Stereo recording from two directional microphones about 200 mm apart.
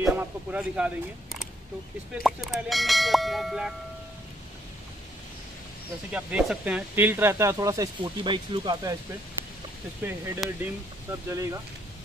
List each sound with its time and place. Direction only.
0.0 s speech: 10° right (ahead or behind)
6.1 s speech: 5° right (ahead or behind); by 8.9 s 25° right (ahead or behind)
10.0 s speech: 10° right (ahead or behind)